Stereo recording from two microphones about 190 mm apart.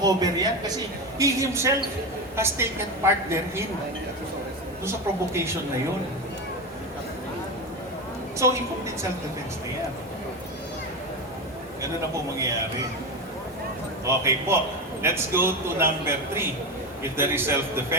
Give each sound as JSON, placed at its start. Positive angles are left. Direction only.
{"t": 0.0, "sound": "a man's voice", "side_deg": -20}
{"t": 4.9, "sound": "a man's voice", "side_deg": -15}
{"t": 11.8, "sound": "a man's voice", "side_deg": -15}
{"t": 14.0, "sound": "a man's voice", "side_deg": -15}